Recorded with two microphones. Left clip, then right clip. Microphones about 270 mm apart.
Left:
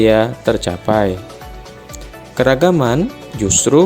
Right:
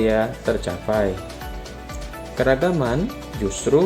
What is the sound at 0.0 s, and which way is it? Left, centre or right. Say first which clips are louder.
Speech: left 7 dB; left.